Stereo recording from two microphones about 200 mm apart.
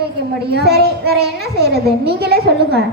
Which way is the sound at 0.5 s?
55° right (ahead or behind).